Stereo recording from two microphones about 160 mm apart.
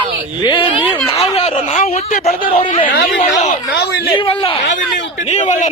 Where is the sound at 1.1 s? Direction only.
40° left (ahead or behind).